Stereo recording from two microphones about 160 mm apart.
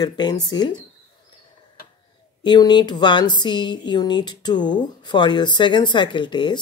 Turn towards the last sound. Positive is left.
turn(degrees=30)  # may be behind; listen again after turning